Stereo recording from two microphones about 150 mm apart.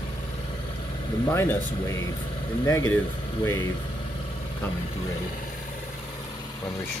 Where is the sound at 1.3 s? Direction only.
15° left (ahead or behind).